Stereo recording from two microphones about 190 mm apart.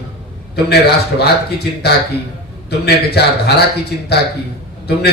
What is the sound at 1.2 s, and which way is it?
A man's voice, 60° left (ahead or behind).